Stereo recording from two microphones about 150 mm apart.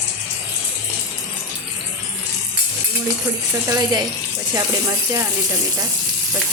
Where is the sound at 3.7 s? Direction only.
25° right (ahead or behind).